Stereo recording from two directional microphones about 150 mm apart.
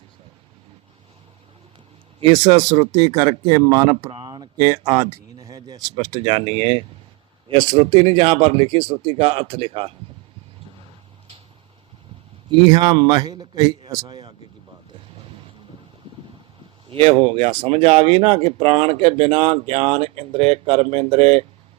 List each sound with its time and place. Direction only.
2.3 s a man's voice: 30° right (ahead or behind)
4.0 s speech: 40° right (ahead or behind)
4.3 s speech: 25° right (ahead or behind)
12.6 s a man's voice: 25° right (ahead or behind)
16.9 s speech: 35° right (ahead or behind)